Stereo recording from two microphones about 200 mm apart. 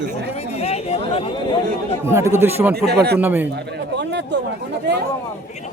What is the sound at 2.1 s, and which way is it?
Speech, 15° right (ahead or behind).